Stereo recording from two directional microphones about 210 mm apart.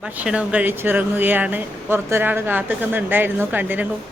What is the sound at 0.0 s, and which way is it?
Speech, 5° right (ahead or behind).